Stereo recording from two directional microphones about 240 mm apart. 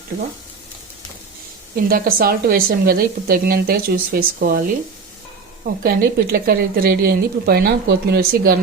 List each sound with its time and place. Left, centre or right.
1.7 s a woman's voice: right
5.8 s a woman's voice: right